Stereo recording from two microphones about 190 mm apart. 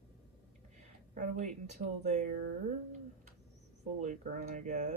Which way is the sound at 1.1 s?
40° right (ahead or behind).